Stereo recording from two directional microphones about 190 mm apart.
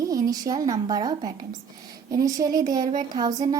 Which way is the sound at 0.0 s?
20° right (ahead or behind).